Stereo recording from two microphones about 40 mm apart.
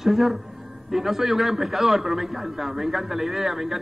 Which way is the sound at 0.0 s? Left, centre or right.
Centre.